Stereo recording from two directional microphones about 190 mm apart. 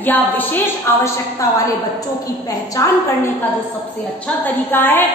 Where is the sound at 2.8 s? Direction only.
15° left (ahead or behind).